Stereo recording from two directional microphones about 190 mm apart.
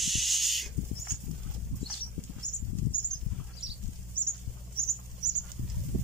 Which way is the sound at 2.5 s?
40° left (ahead or behind).